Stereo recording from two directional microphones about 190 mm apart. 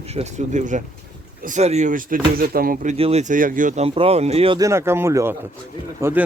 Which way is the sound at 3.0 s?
35° right (ahead or behind).